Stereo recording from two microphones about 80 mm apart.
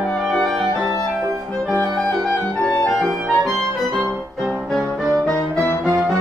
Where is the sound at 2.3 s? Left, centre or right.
Centre.